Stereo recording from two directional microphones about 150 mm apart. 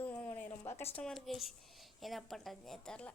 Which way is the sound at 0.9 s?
5° left (ahead or behind).